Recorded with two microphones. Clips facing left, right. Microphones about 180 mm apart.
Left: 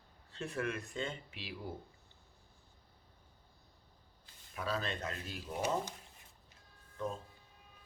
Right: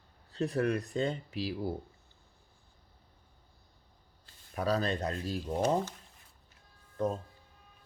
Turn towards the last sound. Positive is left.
turn(degrees=-40)  # may be behind; listen again after turning